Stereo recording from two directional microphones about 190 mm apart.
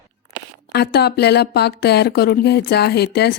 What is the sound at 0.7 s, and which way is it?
Speech, 60° left (ahead or behind).